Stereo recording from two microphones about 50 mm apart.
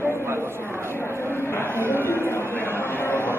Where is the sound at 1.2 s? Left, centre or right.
Left.